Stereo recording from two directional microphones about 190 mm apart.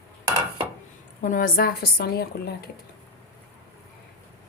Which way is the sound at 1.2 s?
45° left (ahead or behind).